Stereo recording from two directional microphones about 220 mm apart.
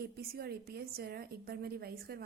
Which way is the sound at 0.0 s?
45° right (ahead or behind).